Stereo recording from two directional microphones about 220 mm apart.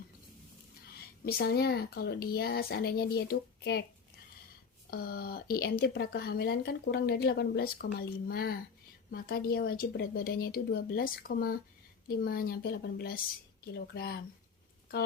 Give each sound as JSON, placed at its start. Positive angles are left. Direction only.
{"t": 0.9, "sound": "speech", "side_deg": 45}
{"t": 4.9, "sound": "speech", "side_deg": 45}